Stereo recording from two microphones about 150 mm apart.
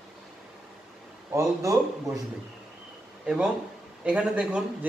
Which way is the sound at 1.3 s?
20° right (ahead or behind).